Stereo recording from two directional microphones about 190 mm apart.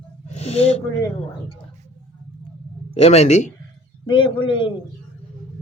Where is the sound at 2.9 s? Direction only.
35° left (ahead or behind).